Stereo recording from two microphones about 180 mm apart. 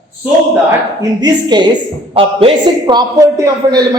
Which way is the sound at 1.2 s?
25° right (ahead or behind).